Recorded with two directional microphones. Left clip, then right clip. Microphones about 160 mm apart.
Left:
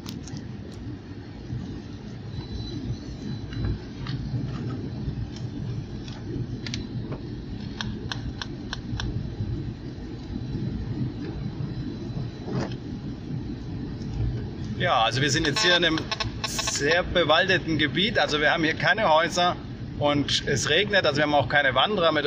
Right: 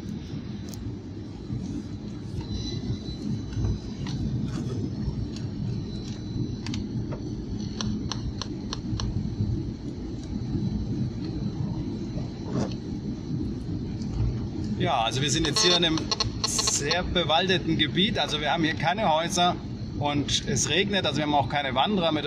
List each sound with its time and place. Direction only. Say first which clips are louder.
14.8 s speech: left 3 dB; centre (ahead or behind)